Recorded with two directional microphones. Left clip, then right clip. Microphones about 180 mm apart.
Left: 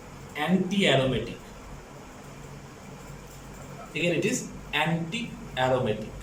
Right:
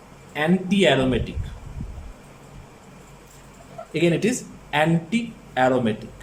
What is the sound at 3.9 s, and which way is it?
Speech, 50° right (ahead or behind).